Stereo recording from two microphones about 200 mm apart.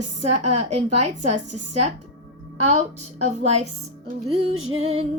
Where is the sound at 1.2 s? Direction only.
35° right (ahead or behind).